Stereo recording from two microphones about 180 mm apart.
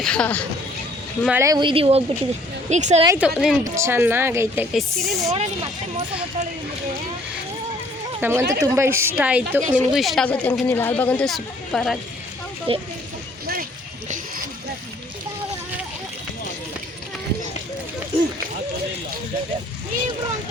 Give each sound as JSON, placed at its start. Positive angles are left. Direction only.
{"t": 0.0, "sound": "a woman's voice", "side_deg": 5}
{"t": 1.3, "sound": "a woman's voice", "side_deg": -15}
{"t": 3.2, "sound": "a woman's voice", "side_deg": -5}
{"t": 3.6, "sound": "a woman's voice", "side_deg": -15}
{"t": 4.8, "sound": "a woman's voice", "side_deg": 0}
{"t": 8.2, "sound": "a woman's voice", "side_deg": -15}
{"t": 12.7, "sound": "a woman's voice", "side_deg": -30}